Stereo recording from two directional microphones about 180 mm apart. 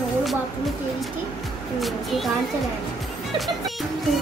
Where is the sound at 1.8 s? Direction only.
Centre (ahead or behind).